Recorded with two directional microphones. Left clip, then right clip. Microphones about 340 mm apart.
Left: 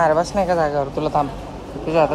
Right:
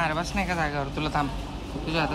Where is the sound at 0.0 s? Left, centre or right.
Centre.